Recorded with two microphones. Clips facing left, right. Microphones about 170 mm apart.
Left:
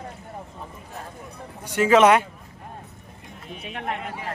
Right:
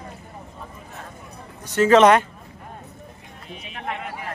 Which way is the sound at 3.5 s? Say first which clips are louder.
Left 3 dB; 50° left (ahead or behind).